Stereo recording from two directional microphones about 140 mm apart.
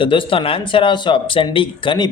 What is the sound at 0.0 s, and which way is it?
Speech, 35° left (ahead or behind).